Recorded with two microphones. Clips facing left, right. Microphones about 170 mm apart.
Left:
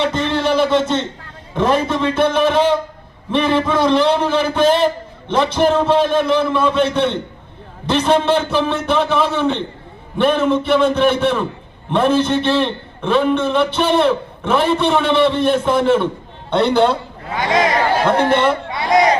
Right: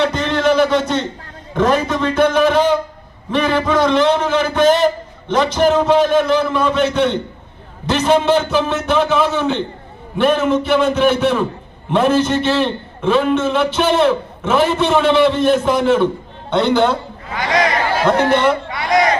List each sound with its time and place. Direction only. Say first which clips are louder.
0.0 s a sound: right 2 dB; 25° left (ahead or behind)
1.5 s a man's voice: right 1 dB; 30° left (ahead or behind)
7.9 s a man's voice: even; 5° right (ahead or behind)
8.1 s a man's voice: right 2 dB; 30° left (ahead or behind)
8.6 s a man's voice: right 1 dB; 5° right (ahead or behind)
16.5 s a man's voice: even; 30° left (ahead or behind)